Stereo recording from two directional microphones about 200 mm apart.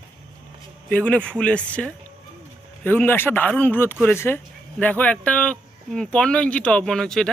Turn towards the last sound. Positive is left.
turn(degrees=5)  # may be behind; listen again after turning